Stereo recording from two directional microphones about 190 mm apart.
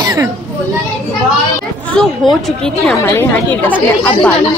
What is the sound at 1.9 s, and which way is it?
A woman's voice, 5° left (ahead or behind).